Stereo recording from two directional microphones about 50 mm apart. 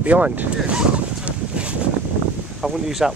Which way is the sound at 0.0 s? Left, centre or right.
Right.